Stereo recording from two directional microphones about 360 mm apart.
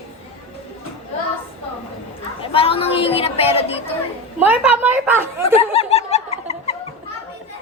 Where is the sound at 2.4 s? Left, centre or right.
Centre.